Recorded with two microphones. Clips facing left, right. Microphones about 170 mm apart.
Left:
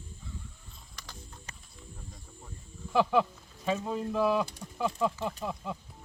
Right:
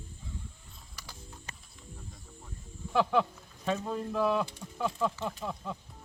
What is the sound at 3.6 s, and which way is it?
Speech, 5° left (ahead or behind).